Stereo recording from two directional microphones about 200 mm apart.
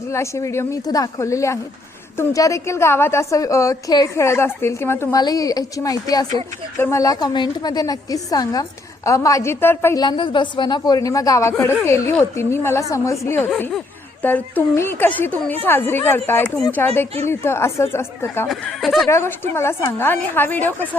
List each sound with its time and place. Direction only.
0.1 s a woman's voice: 15° left (ahead or behind)
18.4 s speech: centre (ahead or behind)
19.0 s speech: 15° left (ahead or behind)